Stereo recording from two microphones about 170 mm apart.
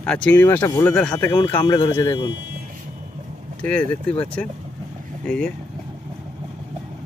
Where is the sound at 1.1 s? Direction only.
20° left (ahead or behind).